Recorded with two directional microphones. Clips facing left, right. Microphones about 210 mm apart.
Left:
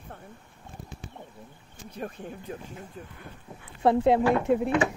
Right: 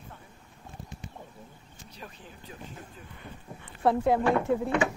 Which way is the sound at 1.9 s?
55° left (ahead or behind).